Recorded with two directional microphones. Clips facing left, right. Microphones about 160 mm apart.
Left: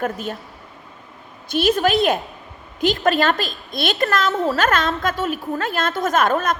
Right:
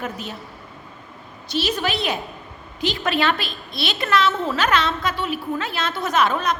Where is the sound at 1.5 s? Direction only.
50° left (ahead or behind).